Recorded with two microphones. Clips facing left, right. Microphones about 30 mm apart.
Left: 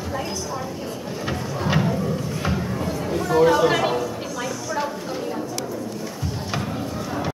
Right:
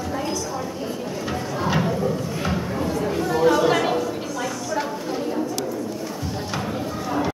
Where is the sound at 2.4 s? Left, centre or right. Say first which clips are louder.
Right 1 dB; centre.